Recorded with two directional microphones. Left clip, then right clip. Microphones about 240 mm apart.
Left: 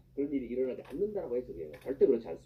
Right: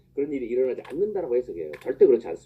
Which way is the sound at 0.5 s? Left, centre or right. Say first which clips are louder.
Right 9 dB; right.